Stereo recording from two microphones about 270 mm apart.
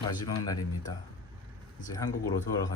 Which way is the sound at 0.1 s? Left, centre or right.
Centre.